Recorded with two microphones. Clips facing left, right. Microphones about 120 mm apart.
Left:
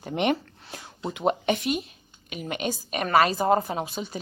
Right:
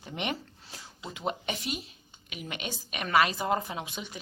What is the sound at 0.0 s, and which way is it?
A woman's voice, 55° left (ahead or behind).